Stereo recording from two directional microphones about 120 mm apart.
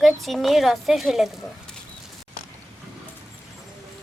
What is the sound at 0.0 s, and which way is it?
A woman's voice, centre (ahead or behind).